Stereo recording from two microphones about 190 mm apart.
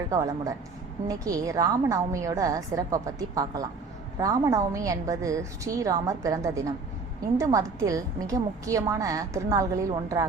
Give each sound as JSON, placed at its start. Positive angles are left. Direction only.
{"t": 0.1, "sound": "a woman's voice", "side_deg": -15}